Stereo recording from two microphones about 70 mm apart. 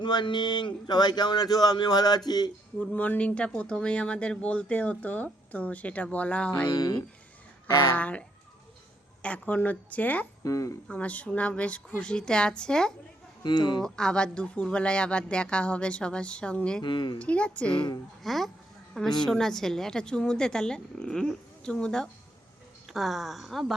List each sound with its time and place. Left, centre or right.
0.0 s speech: left
2.7 s speech: centre
6.7 s speech: left
7.9 s speech: centre
9.2 s speech: left
10.4 s speech: left
10.8 s speech: centre
13.4 s speech: left
13.8 s speech: centre
18.2 s speech: centre
22.9 s speech: centre